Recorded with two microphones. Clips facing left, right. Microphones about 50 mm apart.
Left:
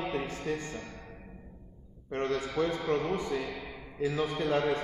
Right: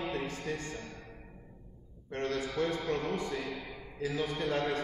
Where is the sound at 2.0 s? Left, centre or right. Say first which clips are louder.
Left 3 dB; left.